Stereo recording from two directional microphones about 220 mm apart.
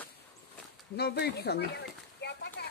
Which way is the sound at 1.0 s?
45° left (ahead or behind).